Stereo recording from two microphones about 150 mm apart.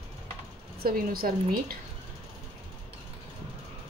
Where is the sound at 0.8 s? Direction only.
75° right (ahead or behind).